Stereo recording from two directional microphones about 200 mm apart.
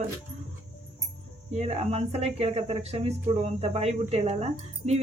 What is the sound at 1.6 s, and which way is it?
A woman's voice, 30° right (ahead or behind).